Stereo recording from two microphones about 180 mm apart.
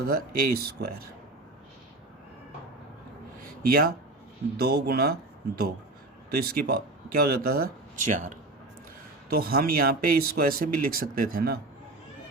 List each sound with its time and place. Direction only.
0.0 s speech: 55° right (ahead or behind)
3.4 s a sound: 55° right (ahead or behind)
4.5 s speech: 60° right (ahead or behind)
6.3 s speech: 60° right (ahead or behind); by 8.4 s 40° right (ahead or behind)
9.3 s speech: 60° right (ahead or behind)